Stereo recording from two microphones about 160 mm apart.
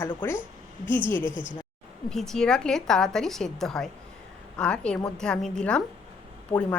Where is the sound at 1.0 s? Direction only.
30° right (ahead or behind).